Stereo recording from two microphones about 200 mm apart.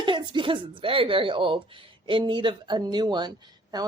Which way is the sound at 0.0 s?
25° right (ahead or behind).